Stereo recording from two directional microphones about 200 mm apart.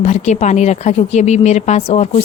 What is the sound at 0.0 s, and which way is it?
Speech, 35° left (ahead or behind).